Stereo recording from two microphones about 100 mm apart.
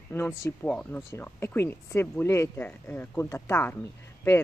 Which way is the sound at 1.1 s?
25° left (ahead or behind).